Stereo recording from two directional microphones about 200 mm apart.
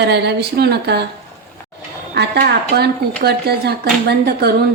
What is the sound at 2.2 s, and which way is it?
Speech, 50° right (ahead or behind).